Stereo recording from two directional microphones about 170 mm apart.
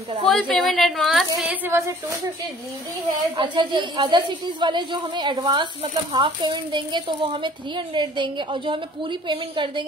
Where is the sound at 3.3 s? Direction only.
30° right (ahead or behind).